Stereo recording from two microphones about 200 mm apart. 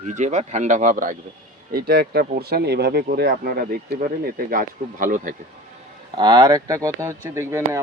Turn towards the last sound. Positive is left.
turn(degrees=-15)  # may be behind; listen again after turning